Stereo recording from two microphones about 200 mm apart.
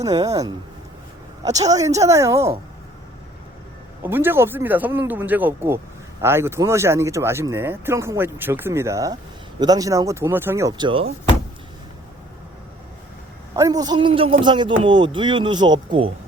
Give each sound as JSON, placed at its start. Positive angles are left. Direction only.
{"t": 0.0, "sound": "speech", "side_deg": -15}
{"t": 4.0, "sound": "speech", "side_deg": -10}
{"t": 13.6, "sound": "speech", "side_deg": -20}